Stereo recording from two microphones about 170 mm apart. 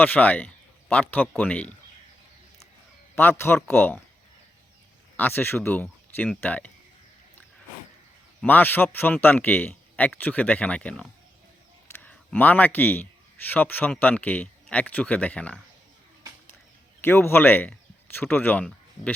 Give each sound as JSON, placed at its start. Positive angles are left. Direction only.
{"t": 0.0, "sound": "a man's voice", "side_deg": 10}
{"t": 3.2, "sound": "a man's voice", "side_deg": 15}
{"t": 5.1, "sound": "a man's voice", "side_deg": 10}
{"t": 8.4, "sound": "a man's voice", "side_deg": 10}
{"t": 17.0, "sound": "speech", "side_deg": 15}